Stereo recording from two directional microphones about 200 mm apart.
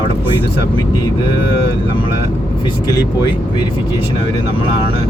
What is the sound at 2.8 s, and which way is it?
Speech, 20° left (ahead or behind).